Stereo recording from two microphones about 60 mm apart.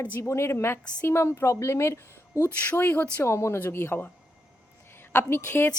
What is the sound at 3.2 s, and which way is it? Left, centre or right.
Speech, left.